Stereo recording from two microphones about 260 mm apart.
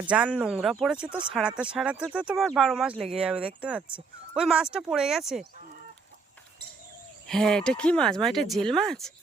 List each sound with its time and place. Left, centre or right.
0.1 s speech: centre
2.9 s speech: right
3.2 s speech: centre
7.3 s speech: centre